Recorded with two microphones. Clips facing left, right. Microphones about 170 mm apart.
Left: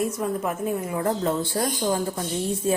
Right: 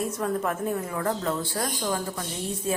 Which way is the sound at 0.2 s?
10° left (ahead or behind).